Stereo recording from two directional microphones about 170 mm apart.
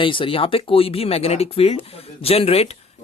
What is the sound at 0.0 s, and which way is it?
Speech, 30° left (ahead or behind).